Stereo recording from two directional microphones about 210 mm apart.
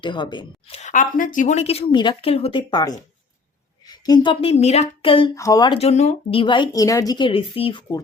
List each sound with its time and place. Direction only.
0.0 s speech: 20° left (ahead or behind)